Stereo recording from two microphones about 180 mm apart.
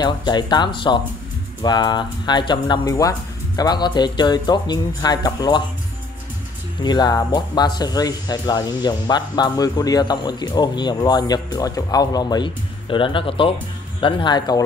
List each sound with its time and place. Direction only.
0.0 s speech: 25° left (ahead or behind)
6.8 s speech: 25° left (ahead or behind)